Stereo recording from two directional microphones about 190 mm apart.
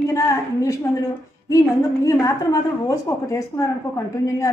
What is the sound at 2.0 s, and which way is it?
A woman's voice, 15° left (ahead or behind).